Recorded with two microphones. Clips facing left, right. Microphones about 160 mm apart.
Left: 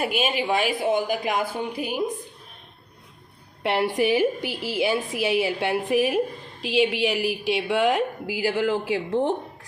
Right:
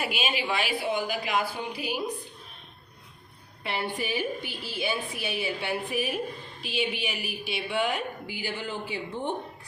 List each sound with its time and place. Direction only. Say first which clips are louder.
0.0 s a woman's voice: left 6 dB; 50° left (ahead or behind)
3.6 s a woman's voice: left 9 dB; 80° left